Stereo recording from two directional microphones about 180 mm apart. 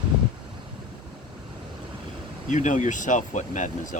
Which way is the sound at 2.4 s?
45° left (ahead or behind).